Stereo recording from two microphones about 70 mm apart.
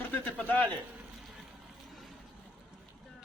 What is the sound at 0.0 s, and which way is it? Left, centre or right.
Speech, left.